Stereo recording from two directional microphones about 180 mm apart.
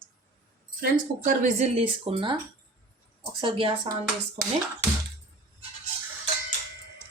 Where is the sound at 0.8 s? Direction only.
45° right (ahead or behind).